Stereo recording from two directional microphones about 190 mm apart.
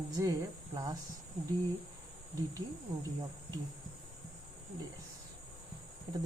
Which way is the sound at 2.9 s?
20° right (ahead or behind).